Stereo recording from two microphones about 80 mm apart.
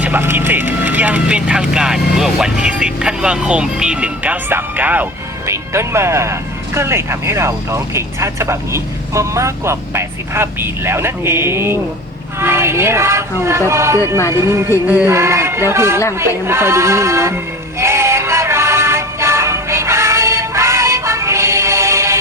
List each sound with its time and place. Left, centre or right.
0.0 s speech: right
5.5 s speech: right
16.1 s a sound: right